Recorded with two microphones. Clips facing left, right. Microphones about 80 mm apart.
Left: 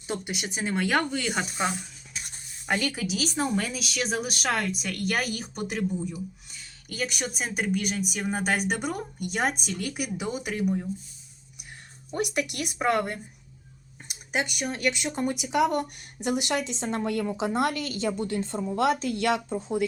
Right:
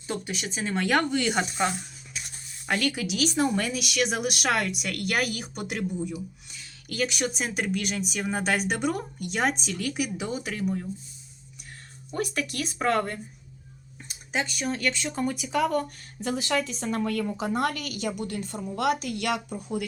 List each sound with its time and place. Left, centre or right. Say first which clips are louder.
0.1 s speech: even; centre
2.9 s speech: right 2 dB; centre
12.1 s a woman's voice: left 1 dB; centre